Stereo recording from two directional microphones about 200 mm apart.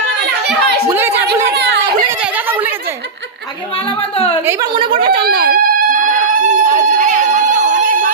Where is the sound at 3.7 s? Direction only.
25° left (ahead or behind).